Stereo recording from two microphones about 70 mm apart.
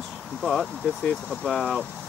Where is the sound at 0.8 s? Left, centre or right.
Centre.